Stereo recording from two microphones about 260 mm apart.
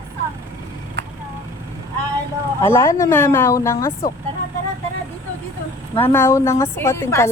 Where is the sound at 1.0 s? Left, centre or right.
Right.